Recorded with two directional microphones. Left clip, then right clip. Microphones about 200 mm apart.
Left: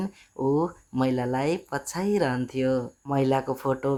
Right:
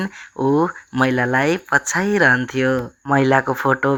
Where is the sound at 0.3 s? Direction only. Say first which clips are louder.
Right 7 dB; 35° right (ahead or behind).